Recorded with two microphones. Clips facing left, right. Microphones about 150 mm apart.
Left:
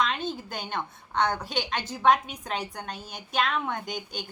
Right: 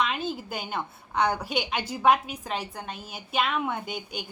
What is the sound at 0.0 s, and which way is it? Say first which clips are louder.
A woman's voice: even; 5° right (ahead or behind).